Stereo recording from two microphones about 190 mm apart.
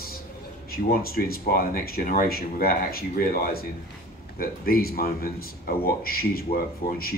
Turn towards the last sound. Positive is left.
turn(degrees=50)  # may be behind; listen again after turning